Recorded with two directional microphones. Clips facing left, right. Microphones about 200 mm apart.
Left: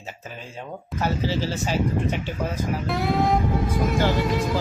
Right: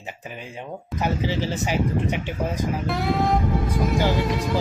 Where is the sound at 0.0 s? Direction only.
15° right (ahead or behind).